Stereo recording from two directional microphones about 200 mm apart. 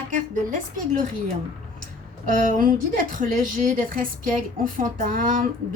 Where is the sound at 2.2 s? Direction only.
40° right (ahead or behind).